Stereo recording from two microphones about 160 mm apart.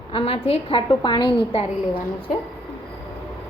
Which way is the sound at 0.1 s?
35° left (ahead or behind).